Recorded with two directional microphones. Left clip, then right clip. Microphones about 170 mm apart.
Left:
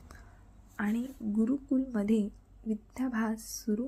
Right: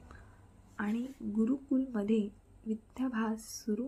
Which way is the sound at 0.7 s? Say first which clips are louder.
Left 3 dB; 10° left (ahead or behind).